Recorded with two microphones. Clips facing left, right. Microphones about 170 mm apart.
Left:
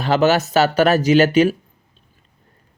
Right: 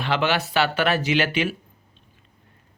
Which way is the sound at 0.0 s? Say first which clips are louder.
Left 7 dB; 40° left (ahead or behind).